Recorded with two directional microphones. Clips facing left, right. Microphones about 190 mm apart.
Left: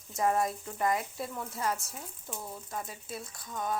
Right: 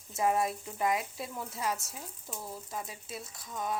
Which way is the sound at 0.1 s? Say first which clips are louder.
Even; 5° right (ahead or behind).